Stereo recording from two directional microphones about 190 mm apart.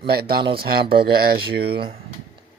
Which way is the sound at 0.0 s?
55° right (ahead or behind).